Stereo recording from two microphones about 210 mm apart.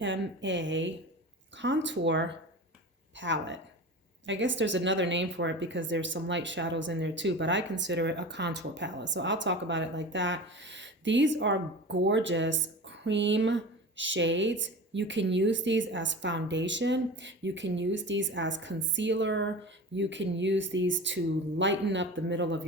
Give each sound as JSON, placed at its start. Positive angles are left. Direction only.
{"t": 0.0, "sound": "a woman's voice", "side_deg": -60}